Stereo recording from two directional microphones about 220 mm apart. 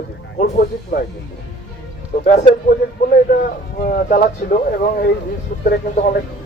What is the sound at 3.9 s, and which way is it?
Speech, 40° left (ahead or behind).